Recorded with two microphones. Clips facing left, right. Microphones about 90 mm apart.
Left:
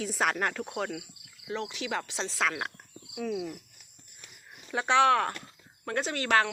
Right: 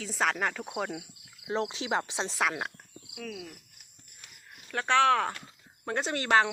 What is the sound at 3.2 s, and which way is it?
Cricket, 10° left (ahead or behind).